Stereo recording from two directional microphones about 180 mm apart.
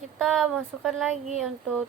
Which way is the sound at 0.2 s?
Centre (ahead or behind).